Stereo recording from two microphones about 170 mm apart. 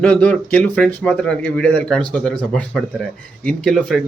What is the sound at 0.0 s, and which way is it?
Speech, 10° left (ahead or behind).